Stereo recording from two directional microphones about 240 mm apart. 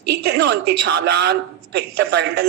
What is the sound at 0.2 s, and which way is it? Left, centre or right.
A woman's voice, right.